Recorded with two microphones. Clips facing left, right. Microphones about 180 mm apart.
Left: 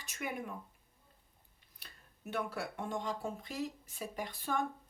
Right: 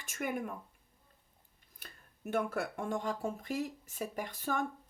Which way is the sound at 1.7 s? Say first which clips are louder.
Right 4 dB; 50° right (ahead or behind).